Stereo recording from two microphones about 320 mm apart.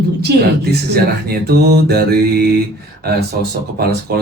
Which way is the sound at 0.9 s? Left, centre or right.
Right.